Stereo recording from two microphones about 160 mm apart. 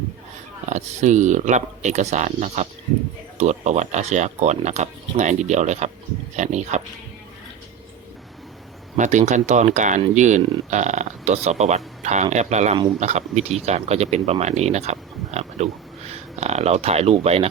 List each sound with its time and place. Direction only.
0.7 s speech: 45° right (ahead or behind)
9.0 s speech: 50° right (ahead or behind)